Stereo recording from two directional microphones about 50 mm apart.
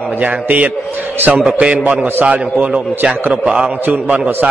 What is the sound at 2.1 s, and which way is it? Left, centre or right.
A man's voice, right.